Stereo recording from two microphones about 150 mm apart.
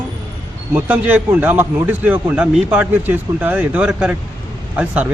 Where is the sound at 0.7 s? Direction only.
10° right (ahead or behind).